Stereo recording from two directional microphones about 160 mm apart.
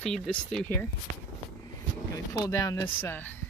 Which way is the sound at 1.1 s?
55° right (ahead or behind).